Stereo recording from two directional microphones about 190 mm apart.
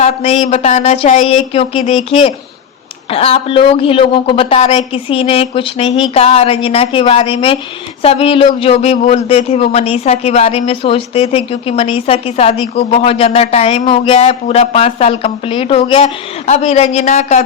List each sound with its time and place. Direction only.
0.0 s a woman's voice: 35° left (ahead or behind)